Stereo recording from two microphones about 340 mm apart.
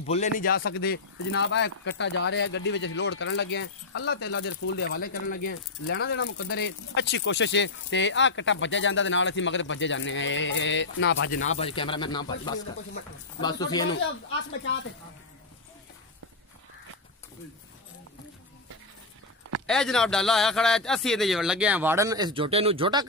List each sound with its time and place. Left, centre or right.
0.0 s speech: left
11.4 s speech: centre
13.4 s speech: centre
19.6 s a man's voice: centre